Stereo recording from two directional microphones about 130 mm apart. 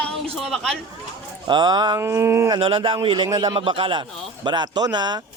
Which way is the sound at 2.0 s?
20° right (ahead or behind).